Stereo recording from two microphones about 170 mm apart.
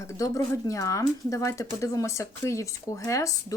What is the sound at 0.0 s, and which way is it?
Speech, 20° left (ahead or behind).